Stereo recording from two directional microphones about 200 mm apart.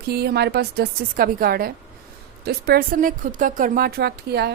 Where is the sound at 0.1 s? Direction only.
55° right (ahead or behind).